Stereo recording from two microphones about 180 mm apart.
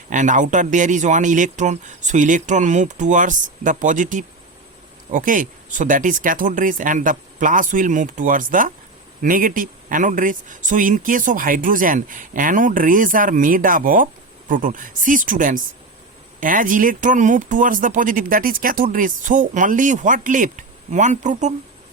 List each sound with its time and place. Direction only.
0.1 s speech: 45° right (ahead or behind)